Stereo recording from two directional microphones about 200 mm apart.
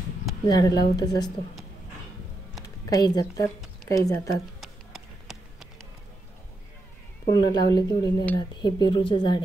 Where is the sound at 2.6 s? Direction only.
20° left (ahead or behind).